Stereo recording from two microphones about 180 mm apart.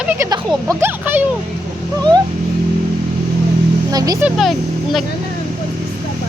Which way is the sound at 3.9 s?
20° right (ahead or behind).